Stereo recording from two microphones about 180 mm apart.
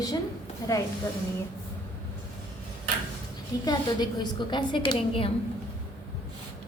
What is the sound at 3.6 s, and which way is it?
A woman's voice, 25° left (ahead or behind).